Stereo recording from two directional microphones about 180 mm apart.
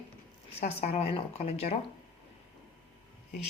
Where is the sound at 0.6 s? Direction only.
35° left (ahead or behind).